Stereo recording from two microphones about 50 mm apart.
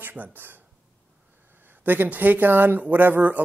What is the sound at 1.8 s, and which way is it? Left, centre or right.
Speech, right.